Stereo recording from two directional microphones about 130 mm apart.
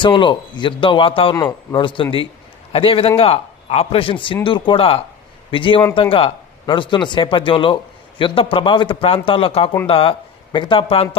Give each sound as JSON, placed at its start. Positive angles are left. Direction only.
{"t": 0.0, "sound": "a man's voice", "side_deg": 40}